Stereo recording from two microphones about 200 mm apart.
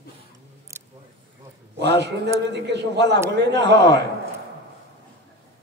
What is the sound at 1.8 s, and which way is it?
A man's voice, 55° right (ahead or behind).